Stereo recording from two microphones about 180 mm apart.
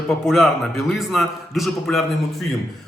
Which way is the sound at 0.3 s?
Centre (ahead or behind).